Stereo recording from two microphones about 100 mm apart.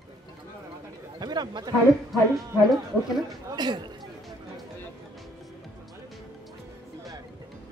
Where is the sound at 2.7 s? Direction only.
Centre (ahead or behind).